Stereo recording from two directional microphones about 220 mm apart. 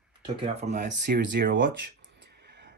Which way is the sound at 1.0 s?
50° right (ahead or behind).